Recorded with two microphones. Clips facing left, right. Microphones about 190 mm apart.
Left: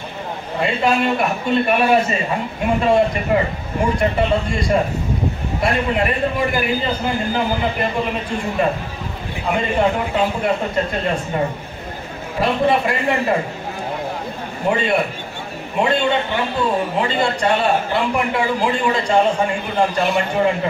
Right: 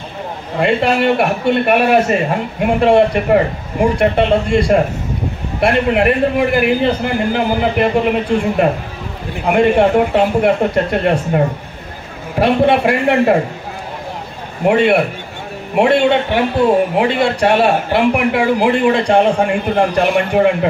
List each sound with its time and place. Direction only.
0.6 s speech: 60° right (ahead or behind)
14.7 s a man's voice: 70° right (ahead or behind)